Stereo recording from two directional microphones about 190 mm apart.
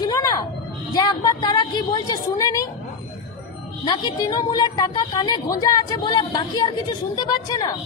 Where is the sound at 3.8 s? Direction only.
25° left (ahead or behind).